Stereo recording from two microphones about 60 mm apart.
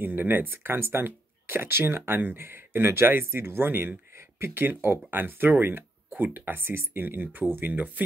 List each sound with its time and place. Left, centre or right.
0.0 s speech: right